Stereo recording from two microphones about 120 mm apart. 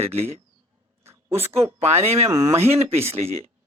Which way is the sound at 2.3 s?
25° right (ahead or behind).